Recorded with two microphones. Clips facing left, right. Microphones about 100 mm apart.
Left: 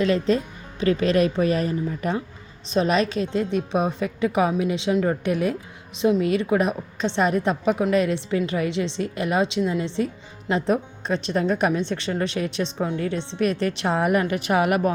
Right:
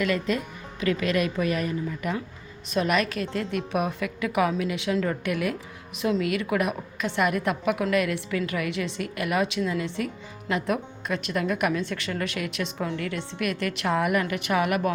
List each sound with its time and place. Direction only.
0.0 s a woman's voice: 30° left (ahead or behind)